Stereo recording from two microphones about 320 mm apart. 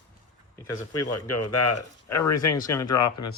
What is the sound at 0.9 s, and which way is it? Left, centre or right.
Speech, left.